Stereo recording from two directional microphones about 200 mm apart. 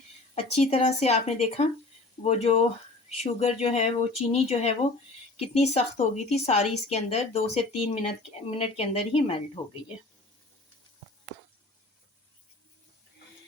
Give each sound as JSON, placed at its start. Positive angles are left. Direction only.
{"t": 0.3, "sound": "speech", "side_deg": 30}